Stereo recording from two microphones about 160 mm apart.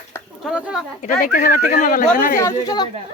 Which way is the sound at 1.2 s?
55° left (ahead or behind).